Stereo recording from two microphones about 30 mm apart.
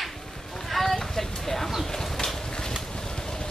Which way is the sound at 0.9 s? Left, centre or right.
Centre.